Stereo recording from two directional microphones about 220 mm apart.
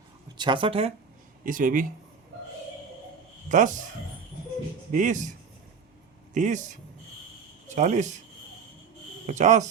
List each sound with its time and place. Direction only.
0.3 s speech: 20° right (ahead or behind)
1.5 s speech: 35° right (ahead or behind)
3.5 s speech: 35° right (ahead or behind)
4.9 s speech: 35° right (ahead or behind)
6.3 s speech: 35° right (ahead or behind)
9.2 s speech: 35° right (ahead or behind)